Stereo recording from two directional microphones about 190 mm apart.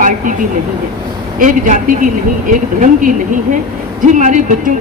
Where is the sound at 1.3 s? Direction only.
45° right (ahead or behind).